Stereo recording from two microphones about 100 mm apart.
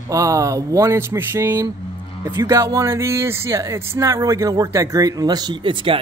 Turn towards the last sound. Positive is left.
turn(degrees=-55)  # may be behind; listen again after turning